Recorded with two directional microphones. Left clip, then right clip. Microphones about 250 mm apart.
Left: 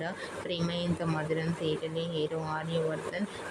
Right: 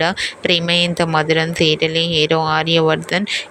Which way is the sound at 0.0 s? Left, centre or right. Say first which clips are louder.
Right 18 dB; right.